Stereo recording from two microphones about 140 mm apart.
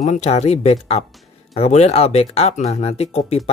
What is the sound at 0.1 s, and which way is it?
Speech, 50° left (ahead or behind).